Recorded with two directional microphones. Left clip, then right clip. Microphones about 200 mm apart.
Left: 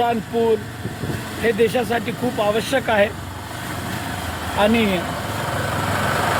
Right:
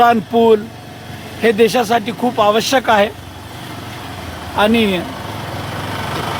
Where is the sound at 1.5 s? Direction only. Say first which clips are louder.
Right 6 dB; 35° right (ahead or behind).